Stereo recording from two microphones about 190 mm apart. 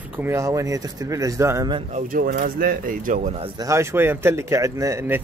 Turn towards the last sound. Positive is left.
turn(degrees=-10)  # may be behind; listen again after turning